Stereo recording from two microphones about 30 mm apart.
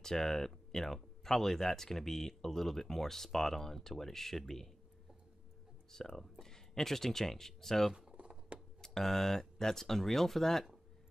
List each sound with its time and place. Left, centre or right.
0.0 s speech: centre
5.9 s speech: centre